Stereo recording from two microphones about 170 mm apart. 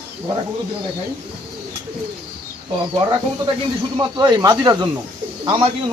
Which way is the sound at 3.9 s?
25° right (ahead or behind).